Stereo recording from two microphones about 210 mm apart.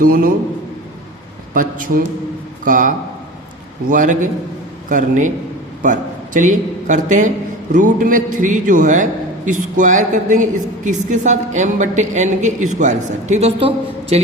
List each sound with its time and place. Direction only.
0.0 s a man's voice: 45° right (ahead or behind)
1.5 s a man's voice: 40° right (ahead or behind)